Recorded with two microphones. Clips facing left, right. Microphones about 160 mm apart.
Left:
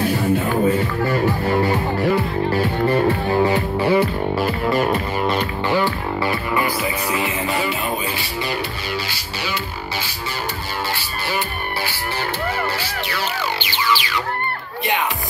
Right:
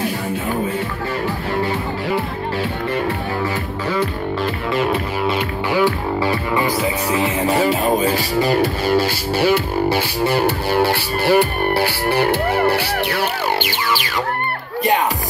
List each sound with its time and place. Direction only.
3.8 s music: 10° left (ahead or behind)
4.6 s music: centre (ahead or behind); by 7.2 s 20° right (ahead or behind)
7.4 s music: 40° right (ahead or behind)